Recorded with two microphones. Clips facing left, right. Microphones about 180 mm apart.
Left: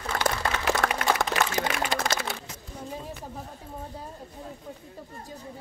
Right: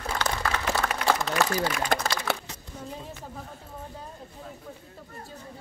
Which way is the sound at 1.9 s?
50° right (ahead or behind).